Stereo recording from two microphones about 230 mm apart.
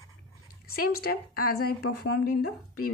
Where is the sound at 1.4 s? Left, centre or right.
Left.